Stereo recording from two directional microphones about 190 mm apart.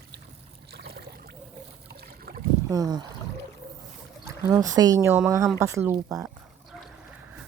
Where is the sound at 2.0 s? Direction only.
50° right (ahead or behind).